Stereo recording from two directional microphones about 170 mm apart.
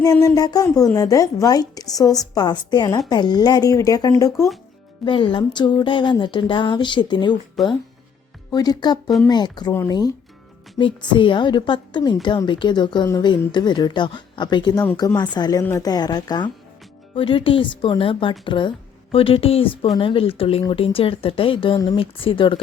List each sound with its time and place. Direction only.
0.0 s speech: 20° left (ahead or behind)
7.6 s speech: centre (ahead or behind)
8.4 s speech: 25° left (ahead or behind)